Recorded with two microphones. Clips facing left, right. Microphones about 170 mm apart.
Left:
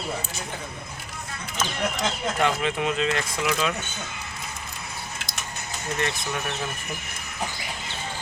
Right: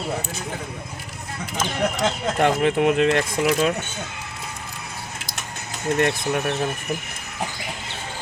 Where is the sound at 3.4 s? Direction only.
40° right (ahead or behind).